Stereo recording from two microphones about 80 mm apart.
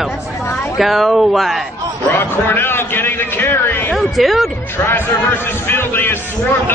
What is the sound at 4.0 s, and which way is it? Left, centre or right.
Speech, centre.